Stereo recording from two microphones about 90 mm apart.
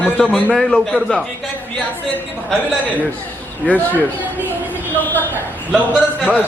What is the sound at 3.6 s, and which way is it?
Speech, 20° left (ahead or behind).